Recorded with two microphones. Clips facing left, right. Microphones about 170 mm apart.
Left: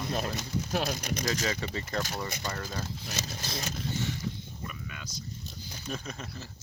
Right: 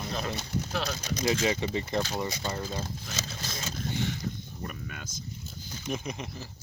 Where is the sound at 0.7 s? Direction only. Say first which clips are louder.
Left 3 dB; 50° left (ahead or behind).